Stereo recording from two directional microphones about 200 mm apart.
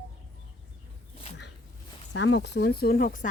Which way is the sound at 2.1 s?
60° left (ahead or behind).